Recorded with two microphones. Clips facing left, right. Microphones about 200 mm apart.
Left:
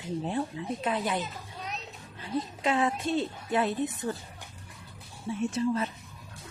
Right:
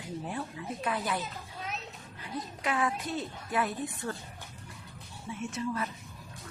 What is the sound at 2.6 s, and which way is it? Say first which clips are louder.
A woman's voice: left 3 dB; 25° left (ahead or behind).